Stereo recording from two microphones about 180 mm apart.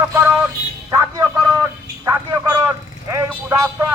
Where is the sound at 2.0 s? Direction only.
20° right (ahead or behind).